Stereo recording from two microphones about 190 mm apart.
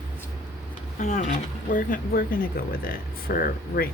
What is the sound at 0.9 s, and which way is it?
Speech, 40° left (ahead or behind).